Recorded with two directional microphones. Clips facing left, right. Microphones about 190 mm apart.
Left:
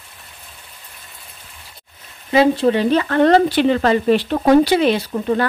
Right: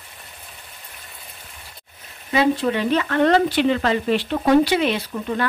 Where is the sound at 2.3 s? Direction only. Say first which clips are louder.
Left 5 dB; 30° left (ahead or behind).